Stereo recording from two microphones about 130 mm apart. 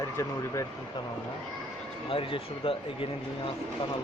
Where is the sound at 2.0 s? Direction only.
45° left (ahead or behind).